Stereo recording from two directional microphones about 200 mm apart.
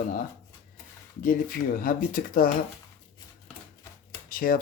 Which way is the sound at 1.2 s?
45° left (ahead or behind).